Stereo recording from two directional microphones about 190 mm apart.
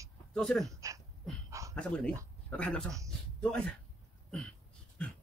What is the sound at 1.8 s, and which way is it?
Speech, 5° left (ahead or behind).